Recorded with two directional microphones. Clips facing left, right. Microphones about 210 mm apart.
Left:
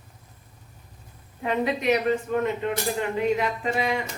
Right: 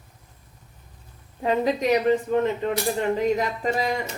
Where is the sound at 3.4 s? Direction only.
40° right (ahead or behind).